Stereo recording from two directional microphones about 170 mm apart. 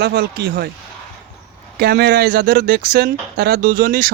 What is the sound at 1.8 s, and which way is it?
Speech, 70° right (ahead or behind).